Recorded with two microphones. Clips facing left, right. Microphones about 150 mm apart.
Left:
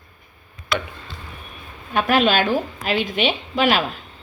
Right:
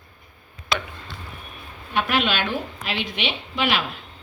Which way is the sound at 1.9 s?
45° left (ahead or behind).